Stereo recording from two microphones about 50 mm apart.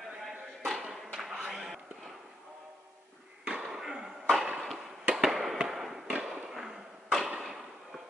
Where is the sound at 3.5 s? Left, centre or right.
Centre.